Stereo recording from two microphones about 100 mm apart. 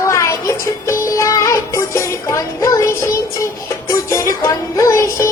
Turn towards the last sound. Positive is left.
turn(degrees=30)  # may be behind; listen again after turning